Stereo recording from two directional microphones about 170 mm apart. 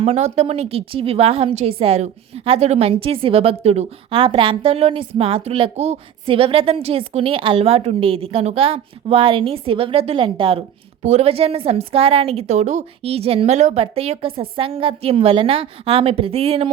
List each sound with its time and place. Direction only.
0.0 s a woman's voice: 40° right (ahead or behind)